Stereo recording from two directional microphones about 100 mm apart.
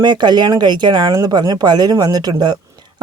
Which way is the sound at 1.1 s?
35° right (ahead or behind).